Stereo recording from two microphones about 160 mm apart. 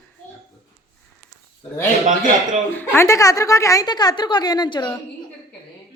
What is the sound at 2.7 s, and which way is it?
A woman's voice, 15° left (ahead or behind).